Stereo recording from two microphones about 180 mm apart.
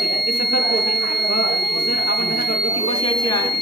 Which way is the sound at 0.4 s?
55° left (ahead or behind).